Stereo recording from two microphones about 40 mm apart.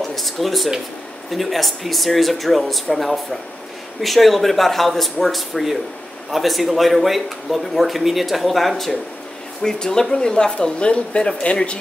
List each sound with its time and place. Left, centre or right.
0.0 s speech: centre
9.6 s speech: centre